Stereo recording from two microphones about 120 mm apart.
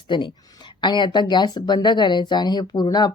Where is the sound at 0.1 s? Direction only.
35° left (ahead or behind).